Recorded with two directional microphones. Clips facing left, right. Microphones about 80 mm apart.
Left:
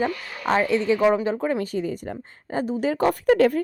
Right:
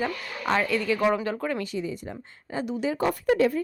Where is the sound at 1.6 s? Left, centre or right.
Left.